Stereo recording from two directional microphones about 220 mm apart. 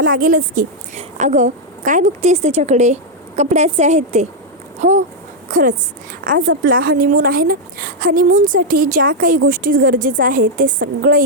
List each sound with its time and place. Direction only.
0.0 s a woman's voice: 40° right (ahead or behind)